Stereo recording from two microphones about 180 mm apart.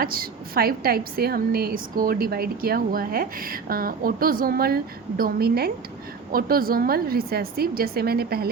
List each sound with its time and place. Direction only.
0.0 s a woman's voice: 55° right (ahead or behind)